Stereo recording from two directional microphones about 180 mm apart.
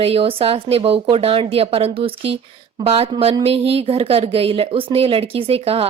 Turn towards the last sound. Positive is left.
turn(degrees=-30)  # may be behind; listen again after turning